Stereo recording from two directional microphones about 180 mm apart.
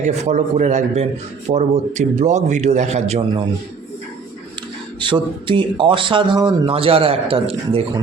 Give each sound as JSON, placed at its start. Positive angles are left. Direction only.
{"t": 0.0, "sound": "a man's voice", "side_deg": -40}
{"t": 4.9, "sound": "speech", "side_deg": -25}